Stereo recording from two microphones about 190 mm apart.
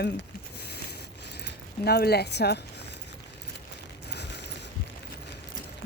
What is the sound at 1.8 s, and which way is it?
Speech, 55° left (ahead or behind).